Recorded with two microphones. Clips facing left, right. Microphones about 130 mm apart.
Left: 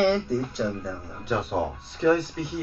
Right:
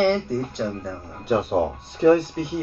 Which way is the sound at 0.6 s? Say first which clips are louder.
Right 1 dB; 25° right (ahead or behind).